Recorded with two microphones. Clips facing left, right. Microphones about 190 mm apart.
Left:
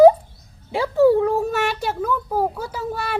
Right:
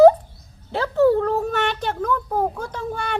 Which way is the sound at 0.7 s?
10° left (ahead or behind).